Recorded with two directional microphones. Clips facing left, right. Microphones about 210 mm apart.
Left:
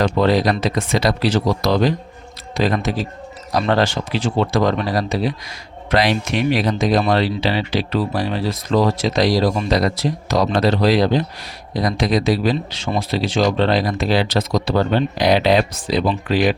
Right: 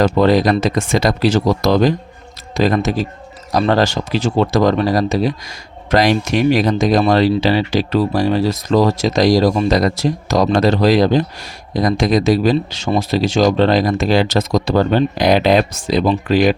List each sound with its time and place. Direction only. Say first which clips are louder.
0.2 s speech: right 4 dB; 45° right (ahead or behind)